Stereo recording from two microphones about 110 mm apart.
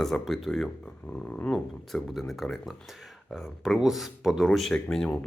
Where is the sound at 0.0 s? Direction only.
Centre (ahead or behind).